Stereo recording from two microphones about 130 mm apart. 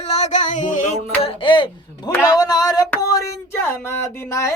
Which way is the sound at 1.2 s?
40° left (ahead or behind).